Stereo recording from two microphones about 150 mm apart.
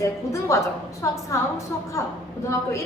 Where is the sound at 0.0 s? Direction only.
20° left (ahead or behind).